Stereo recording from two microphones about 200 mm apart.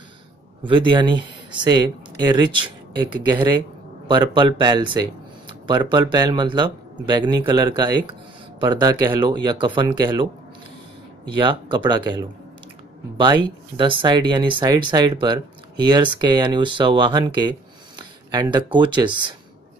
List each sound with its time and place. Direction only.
0.7 s speech: 25° right (ahead or behind)
4.1 s speech: 25° right (ahead or behind)
11.2 s speech: 25° right (ahead or behind)